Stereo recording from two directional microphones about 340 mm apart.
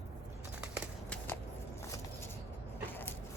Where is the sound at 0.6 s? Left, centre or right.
Centre.